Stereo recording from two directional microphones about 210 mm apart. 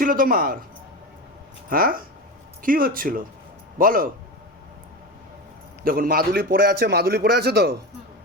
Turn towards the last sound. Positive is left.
turn(degrees=-50)  # may be behind; listen again after turning